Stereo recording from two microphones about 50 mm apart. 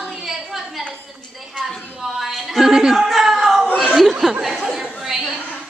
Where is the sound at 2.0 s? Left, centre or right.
Centre.